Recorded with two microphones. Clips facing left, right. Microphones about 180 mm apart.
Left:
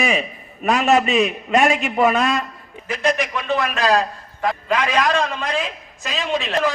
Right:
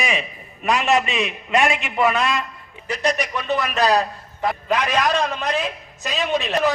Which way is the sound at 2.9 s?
50° left (ahead or behind).